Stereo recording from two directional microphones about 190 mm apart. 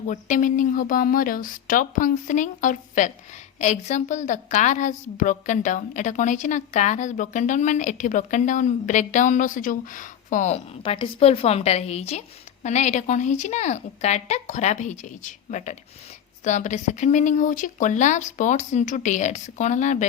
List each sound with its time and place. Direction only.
0.1 s a woman's voice: 40° left (ahead or behind)